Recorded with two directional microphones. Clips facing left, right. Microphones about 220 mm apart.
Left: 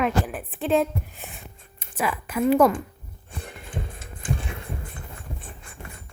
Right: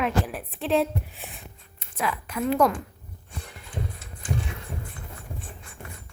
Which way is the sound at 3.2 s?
55° left (ahead or behind).